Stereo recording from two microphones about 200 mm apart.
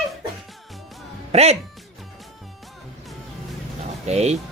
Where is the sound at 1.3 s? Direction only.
30° right (ahead or behind).